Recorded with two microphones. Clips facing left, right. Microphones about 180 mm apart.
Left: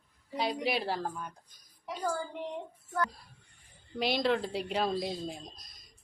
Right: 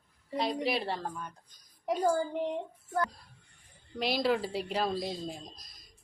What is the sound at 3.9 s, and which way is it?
A woman's voice, centre (ahead or behind).